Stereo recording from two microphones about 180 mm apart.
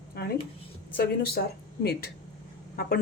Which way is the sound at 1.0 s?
60° left (ahead or behind).